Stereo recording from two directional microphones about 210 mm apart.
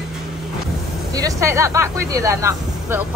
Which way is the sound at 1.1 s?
15° right (ahead or behind).